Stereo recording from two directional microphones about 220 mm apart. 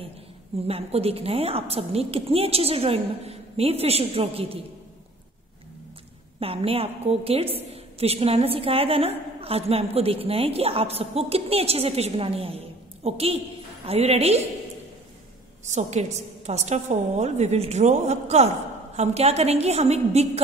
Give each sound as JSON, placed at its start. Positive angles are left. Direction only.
{"t": 0.7, "sound": "a woman's voice", "side_deg": -25}
{"t": 6.4, "sound": "a woman's voice", "side_deg": -25}
{"t": 15.6, "sound": "a woman's voice", "side_deg": -30}